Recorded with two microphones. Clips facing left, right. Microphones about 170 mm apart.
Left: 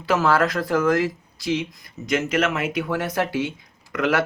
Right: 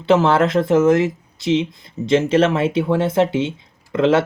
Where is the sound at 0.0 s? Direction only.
25° right (ahead or behind).